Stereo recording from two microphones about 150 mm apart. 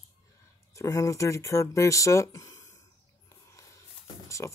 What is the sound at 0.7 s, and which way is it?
Speech, 20° left (ahead or behind).